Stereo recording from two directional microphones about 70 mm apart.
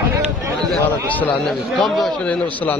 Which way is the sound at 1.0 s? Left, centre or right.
Left.